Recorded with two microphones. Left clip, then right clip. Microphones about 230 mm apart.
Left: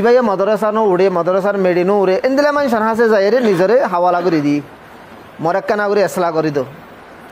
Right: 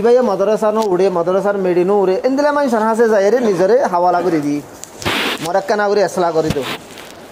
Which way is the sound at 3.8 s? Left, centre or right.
Left.